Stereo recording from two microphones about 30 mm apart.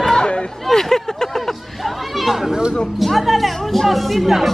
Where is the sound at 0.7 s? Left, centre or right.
Centre.